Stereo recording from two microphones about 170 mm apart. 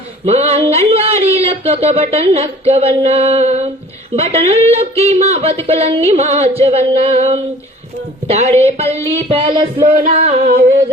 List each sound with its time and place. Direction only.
0.3 s speech: 35° right (ahead or behind)
9.8 s music: 50° right (ahead or behind)